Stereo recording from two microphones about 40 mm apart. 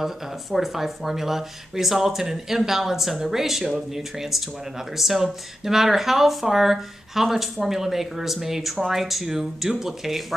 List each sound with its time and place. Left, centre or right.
0.0 s speech: centre